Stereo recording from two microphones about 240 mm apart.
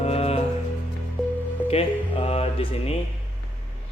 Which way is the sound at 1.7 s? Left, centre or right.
Left.